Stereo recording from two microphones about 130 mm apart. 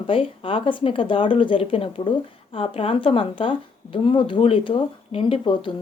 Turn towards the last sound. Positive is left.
turn(degrees=40)  # may be behind; listen again after turning